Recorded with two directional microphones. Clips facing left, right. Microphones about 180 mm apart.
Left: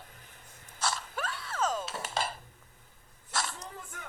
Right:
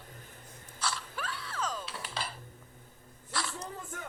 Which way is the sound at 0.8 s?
45° left (ahead or behind).